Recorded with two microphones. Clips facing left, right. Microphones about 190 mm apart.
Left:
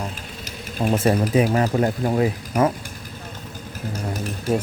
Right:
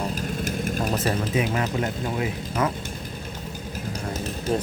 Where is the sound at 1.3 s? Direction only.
35° left (ahead or behind).